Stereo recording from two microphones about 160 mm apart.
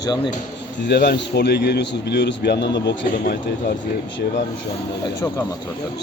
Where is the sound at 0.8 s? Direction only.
90° left; by 3.7 s 70° left (ahead or behind).